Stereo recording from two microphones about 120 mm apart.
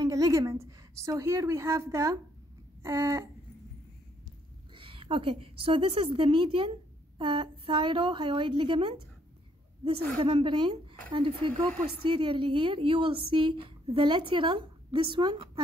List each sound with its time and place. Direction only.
0.0 s a woman's voice: 30° right (ahead or behind)
2.8 s a sound: 25° right (ahead or behind)
4.7 s a woman's voice: 45° right (ahead or behind)